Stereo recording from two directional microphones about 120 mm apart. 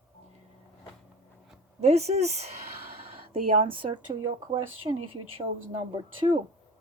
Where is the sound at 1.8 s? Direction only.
65° right (ahead or behind).